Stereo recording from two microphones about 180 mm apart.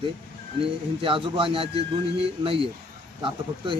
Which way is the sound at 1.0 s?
30° right (ahead or behind).